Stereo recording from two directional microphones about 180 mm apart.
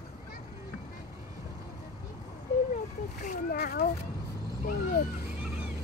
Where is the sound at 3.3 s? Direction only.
55° left (ahead or behind).